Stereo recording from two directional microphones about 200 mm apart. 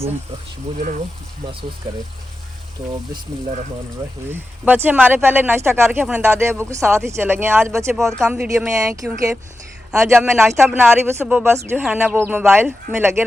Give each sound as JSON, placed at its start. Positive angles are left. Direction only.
{"t": 0.8, "sound": "speech", "side_deg": -40}
{"t": 4.3, "sound": "speech", "side_deg": -10}
{"t": 8.7, "sound": "speech", "side_deg": -15}